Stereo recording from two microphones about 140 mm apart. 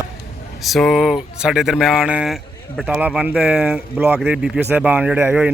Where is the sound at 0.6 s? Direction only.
Centre (ahead or behind).